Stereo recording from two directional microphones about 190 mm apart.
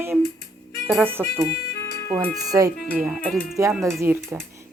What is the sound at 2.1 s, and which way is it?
Speech, 20° right (ahead or behind).